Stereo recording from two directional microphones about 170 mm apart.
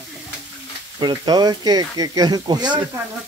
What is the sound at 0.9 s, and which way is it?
Speech, 25° right (ahead or behind).